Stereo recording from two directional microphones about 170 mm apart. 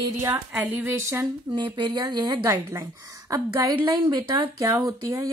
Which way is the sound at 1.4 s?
25° right (ahead or behind).